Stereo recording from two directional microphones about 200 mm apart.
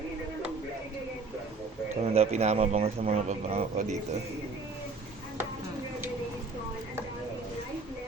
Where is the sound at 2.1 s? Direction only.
30° right (ahead or behind).